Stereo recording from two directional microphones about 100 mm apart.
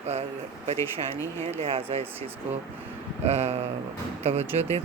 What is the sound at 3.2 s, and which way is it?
Speech, 90° right.